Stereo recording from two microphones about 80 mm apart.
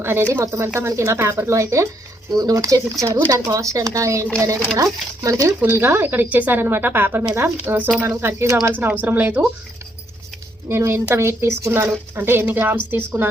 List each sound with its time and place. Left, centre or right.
0.0 s speech: right
2.3 s speech: right
5.6 s a woman's voice: right
8.0 s speech: right
8.8 s a woman's voice: right
10.7 s a woman's voice: right